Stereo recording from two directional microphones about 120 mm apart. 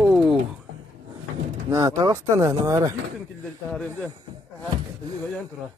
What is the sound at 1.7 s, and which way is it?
Speech, 30° right (ahead or behind).